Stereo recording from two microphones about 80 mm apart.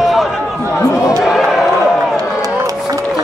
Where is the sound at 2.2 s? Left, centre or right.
Right.